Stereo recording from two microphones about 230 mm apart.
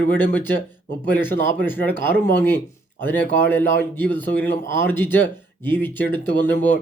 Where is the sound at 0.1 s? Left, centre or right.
Centre.